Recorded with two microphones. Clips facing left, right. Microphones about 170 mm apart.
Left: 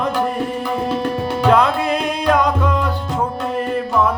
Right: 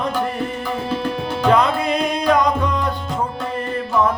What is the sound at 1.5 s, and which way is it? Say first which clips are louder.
Music: left 1 dB; 5° left (ahead or behind).